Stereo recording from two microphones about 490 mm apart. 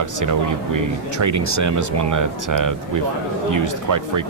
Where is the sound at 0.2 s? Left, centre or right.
Right.